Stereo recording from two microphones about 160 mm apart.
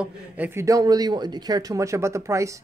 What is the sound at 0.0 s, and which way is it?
A man's voice, 10° right (ahead or behind).